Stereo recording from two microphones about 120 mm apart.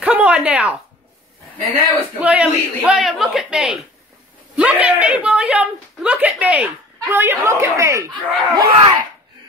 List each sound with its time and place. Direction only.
0.0 s a sound: 10° right (ahead or behind)
2.1 s a man's voice: 10° right (ahead or behind)
8.1 s speech: 40° right (ahead or behind)